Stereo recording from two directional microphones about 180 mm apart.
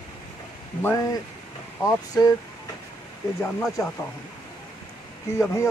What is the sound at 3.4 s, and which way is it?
Speech, centre (ahead or behind).